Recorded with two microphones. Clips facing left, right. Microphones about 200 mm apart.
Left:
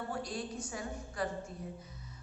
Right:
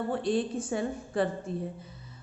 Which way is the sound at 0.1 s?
25° right (ahead or behind).